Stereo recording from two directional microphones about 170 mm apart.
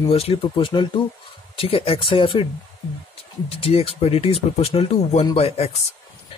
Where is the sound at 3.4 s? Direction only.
35° left (ahead or behind).